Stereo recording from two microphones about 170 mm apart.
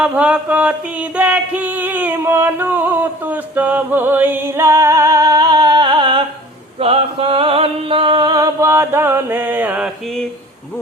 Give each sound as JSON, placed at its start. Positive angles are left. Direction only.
{"t": 0.0, "sound": "singing", "side_deg": -5}
{"t": 6.7, "sound": "music", "side_deg": -35}